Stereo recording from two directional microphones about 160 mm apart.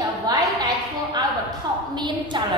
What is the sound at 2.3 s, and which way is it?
Speech, 30° right (ahead or behind).